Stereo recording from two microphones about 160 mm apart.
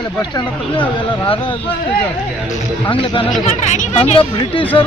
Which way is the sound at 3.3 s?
50° left (ahead or behind).